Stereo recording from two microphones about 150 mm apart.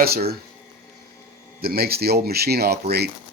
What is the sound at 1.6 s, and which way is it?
Speech, 90° right.